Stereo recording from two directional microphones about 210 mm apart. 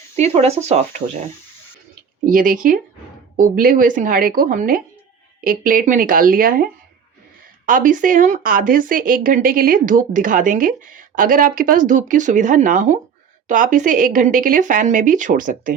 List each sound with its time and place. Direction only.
0.2 s speech: 30° right (ahead or behind)
2.2 s speech: 40° right (ahead or behind)